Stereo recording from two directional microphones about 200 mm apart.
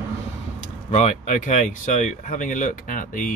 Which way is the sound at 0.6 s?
35° left (ahead or behind).